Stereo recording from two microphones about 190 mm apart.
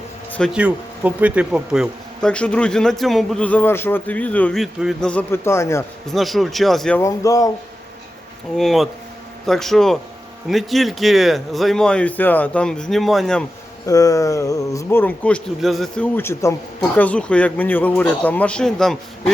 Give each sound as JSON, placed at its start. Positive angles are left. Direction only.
{"t": 0.3, "sound": "a sound", "side_deg": 5}
{"t": 0.5, "sound": "speech", "side_deg": -5}
{"t": 6.1, "sound": "speech", "side_deg": 0}
{"t": 7.0, "sound": "speech", "side_deg": 20}
{"t": 8.5, "sound": "speech", "side_deg": 0}
{"t": 13.8, "sound": "speech", "side_deg": 20}